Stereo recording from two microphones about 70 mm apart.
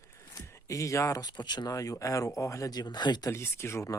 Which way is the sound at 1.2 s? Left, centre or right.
Left.